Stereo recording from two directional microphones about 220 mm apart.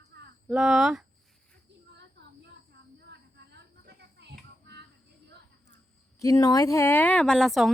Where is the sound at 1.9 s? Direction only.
50° right (ahead or behind).